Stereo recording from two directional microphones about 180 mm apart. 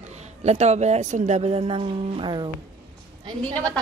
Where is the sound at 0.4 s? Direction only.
40° right (ahead or behind).